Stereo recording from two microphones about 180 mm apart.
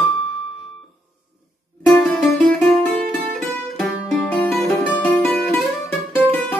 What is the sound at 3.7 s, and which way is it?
Music, 5° left (ahead or behind).